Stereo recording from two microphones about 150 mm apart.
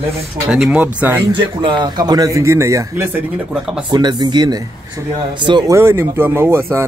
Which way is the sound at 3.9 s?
30° right (ahead or behind).